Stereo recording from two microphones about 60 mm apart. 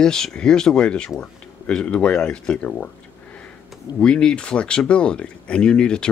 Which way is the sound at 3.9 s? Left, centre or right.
Centre.